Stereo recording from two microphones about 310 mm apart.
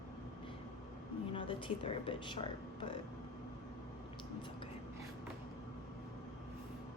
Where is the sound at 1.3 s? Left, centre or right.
Centre.